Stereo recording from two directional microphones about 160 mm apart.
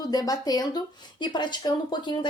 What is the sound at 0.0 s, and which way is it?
A woman's voice, 25° left (ahead or behind).